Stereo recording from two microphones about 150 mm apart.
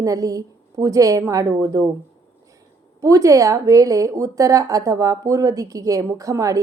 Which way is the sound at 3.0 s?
20° right (ahead or behind).